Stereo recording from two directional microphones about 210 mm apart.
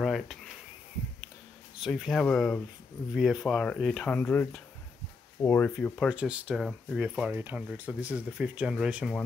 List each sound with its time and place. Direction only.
0.0 s a sound: centre (ahead or behind)
1.8 s speech: centre (ahead or behind)
6.0 s speech: 5° right (ahead or behind)